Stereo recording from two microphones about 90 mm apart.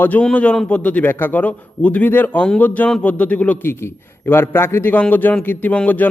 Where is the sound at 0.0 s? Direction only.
20° left (ahead or behind).